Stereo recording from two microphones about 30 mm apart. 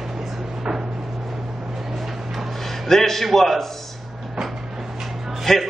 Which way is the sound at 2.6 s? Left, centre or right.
Centre.